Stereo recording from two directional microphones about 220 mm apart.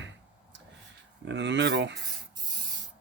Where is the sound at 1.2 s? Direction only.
55° right (ahead or behind).